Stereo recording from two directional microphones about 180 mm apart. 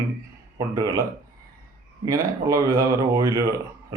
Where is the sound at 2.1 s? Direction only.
20° right (ahead or behind).